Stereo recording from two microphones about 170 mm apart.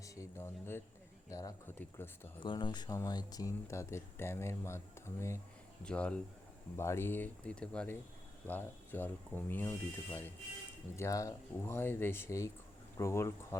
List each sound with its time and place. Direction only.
0.0 s a sound: 15° left (ahead or behind)
1.3 s speech: 20° left (ahead or behind)
2.4 s speech: 25° left (ahead or behind)